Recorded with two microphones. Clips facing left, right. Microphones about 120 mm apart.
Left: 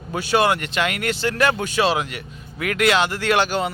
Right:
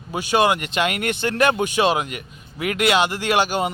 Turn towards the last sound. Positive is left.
turn(degrees=-15)  # may be behind; listen again after turning